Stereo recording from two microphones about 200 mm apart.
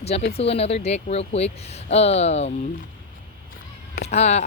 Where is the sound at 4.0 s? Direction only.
35° left (ahead or behind).